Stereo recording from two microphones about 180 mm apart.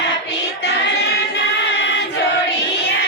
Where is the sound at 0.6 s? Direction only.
70° left (ahead or behind).